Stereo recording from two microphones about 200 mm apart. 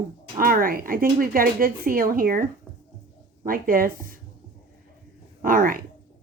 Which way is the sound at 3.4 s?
45° right (ahead or behind).